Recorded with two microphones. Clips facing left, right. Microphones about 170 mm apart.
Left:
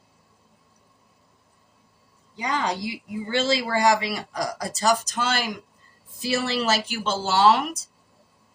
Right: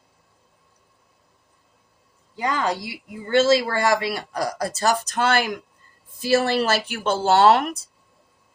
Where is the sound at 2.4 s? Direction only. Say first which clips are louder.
Right 3 dB; 50° right (ahead or behind).